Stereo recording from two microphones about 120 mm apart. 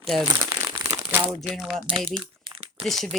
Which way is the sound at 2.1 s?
45° right (ahead or behind).